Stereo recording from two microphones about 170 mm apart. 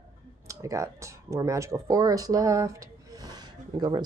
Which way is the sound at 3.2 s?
25° right (ahead or behind).